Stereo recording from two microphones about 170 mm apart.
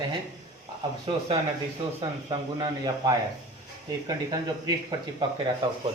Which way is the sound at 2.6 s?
25° right (ahead or behind).